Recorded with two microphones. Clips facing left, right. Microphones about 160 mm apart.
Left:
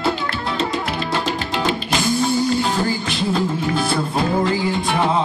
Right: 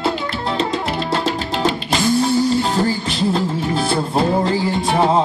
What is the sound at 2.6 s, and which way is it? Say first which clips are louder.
Music: right 2 dB; 30° right (ahead or behind).